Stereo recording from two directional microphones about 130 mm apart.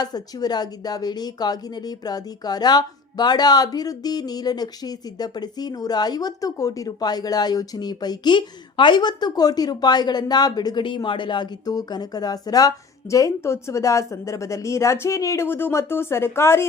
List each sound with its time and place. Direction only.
0.0 s a woman's voice: 30° left (ahead or behind)